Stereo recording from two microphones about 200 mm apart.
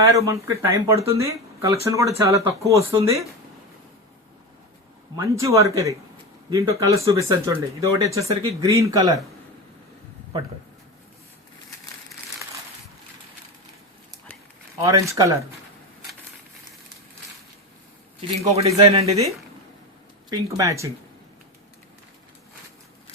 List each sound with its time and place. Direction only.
0.0 s speech: 15° right (ahead or behind)
5.1 s speech: 15° right (ahead or behind)
14.8 s speech: 15° right (ahead or behind)
18.5 s speech: 30° right (ahead or behind)
20.3 s speech: 15° right (ahead or behind)